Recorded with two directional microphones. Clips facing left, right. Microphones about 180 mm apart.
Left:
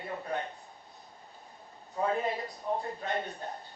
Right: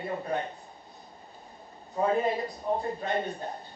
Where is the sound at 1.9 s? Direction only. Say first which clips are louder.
Right 4 dB; 25° right (ahead or behind).